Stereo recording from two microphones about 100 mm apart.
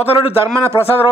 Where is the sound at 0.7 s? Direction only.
60° left (ahead or behind).